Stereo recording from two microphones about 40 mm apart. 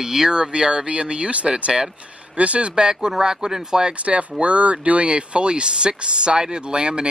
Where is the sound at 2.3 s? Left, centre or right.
Right.